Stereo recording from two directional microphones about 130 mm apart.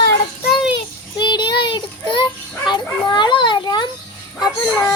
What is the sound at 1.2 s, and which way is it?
Dog, 35° left (ahead or behind).